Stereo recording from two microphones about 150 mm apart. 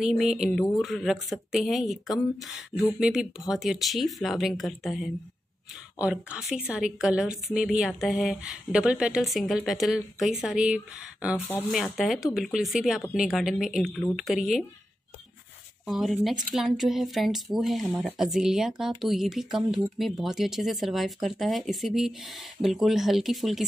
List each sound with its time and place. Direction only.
0.0 s a woman's voice: centre (ahead or behind)
15.8 s a woman's voice: centre (ahead or behind)